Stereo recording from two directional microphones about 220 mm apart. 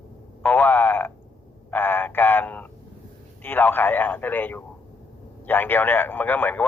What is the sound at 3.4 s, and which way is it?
A man's voice, 10° left (ahead or behind).